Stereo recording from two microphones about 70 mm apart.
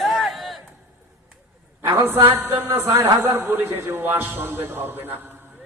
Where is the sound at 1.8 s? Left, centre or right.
Right.